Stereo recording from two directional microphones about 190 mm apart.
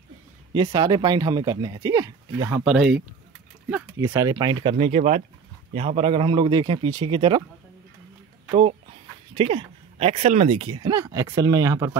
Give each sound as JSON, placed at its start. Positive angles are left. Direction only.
{"t": 0.6, "sound": "speech", "side_deg": -20}
{"t": 2.6, "sound": "speech", "side_deg": 0}
{"t": 4.7, "sound": "speech", "side_deg": -40}
{"t": 8.5, "sound": "speech", "side_deg": -30}